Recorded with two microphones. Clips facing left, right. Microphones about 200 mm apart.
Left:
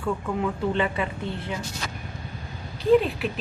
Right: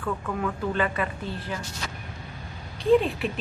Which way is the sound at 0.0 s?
15° left (ahead or behind).